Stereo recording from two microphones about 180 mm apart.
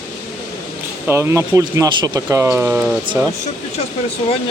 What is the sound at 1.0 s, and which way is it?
Speech, 15° right (ahead or behind).